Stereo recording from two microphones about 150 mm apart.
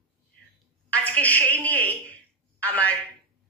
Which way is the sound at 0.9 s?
10° left (ahead or behind).